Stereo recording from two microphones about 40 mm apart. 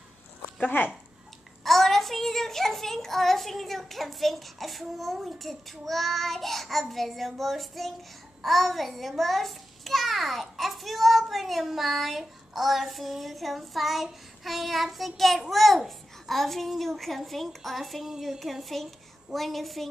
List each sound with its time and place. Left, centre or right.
0.7 s speech: left
1.6 s a child's voice: centre